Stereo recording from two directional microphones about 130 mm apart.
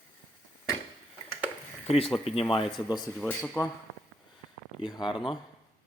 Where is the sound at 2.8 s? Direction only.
30° left (ahead or behind).